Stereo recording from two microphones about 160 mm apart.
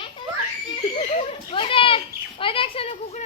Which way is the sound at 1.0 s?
40° left (ahead or behind).